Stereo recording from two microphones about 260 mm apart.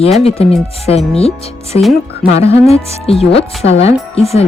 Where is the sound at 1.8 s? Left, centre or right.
Centre.